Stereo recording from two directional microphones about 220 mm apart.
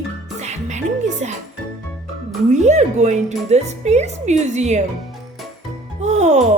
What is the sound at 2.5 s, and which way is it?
Speech, 30° right (ahead or behind).